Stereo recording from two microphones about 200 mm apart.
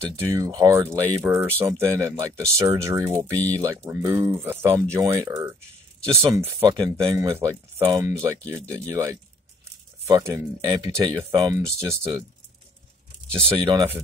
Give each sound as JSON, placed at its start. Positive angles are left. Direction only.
{"t": 0.2, "sound": "speech", "side_deg": -15}
{"t": 3.3, "sound": "speech", "side_deg": 10}
{"t": 3.6, "sound": "speech", "side_deg": -15}
{"t": 13.6, "sound": "speech", "side_deg": -20}